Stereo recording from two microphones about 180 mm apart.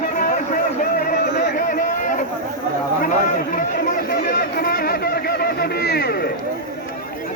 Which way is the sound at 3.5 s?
50° left (ahead or behind).